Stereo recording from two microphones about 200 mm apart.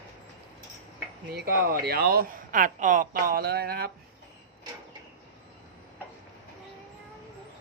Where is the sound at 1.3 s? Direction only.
50° right (ahead or behind).